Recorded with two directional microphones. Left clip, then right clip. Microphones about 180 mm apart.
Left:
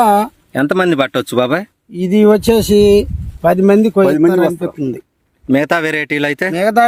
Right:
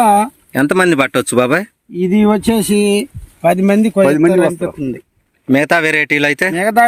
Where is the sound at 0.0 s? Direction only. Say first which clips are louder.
Even; 65° left (ahead or behind).